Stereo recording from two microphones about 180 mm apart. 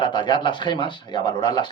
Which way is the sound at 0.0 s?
25° left (ahead or behind).